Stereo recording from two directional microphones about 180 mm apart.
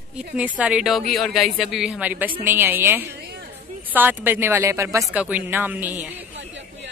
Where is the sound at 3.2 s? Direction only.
60° right (ahead or behind).